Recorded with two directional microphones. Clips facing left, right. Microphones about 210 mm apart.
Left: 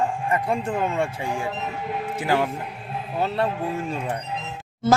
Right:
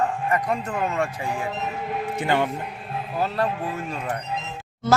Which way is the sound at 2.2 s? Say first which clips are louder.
Even; 5° left (ahead or behind).